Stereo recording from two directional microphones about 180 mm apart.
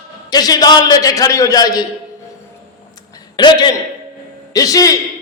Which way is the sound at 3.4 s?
25° left (ahead or behind).